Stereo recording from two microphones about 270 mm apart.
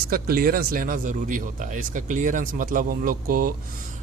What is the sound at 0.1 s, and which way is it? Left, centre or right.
Speech, right.